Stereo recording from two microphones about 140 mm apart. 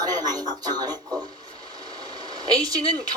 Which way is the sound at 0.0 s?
30° right (ahead or behind).